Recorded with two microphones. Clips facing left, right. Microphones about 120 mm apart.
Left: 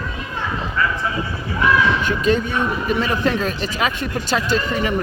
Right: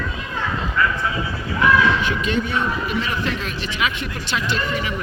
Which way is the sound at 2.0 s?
40° left (ahead or behind).